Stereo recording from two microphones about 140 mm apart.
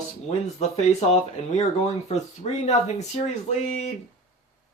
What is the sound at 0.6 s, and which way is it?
Speech, 50° left (ahead or behind).